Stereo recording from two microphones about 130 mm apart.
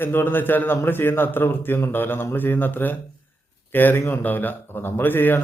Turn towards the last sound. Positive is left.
turn(degrees=15)  # may be behind; listen again after turning